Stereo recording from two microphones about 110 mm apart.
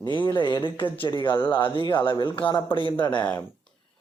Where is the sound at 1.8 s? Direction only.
45° left (ahead or behind).